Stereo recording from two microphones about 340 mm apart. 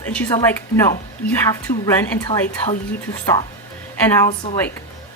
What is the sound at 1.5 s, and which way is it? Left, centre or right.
A woman's voice, centre.